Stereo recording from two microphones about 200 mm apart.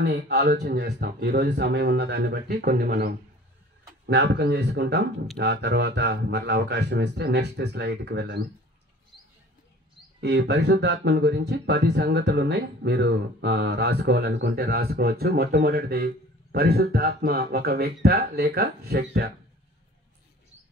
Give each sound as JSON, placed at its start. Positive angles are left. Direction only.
{"t": 0.0, "sound": "speech", "side_deg": -60}
{"t": 10.2, "sound": "speech", "side_deg": -60}